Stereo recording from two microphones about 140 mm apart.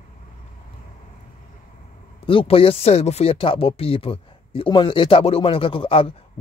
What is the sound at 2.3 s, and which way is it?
Speech, 40° left (ahead or behind).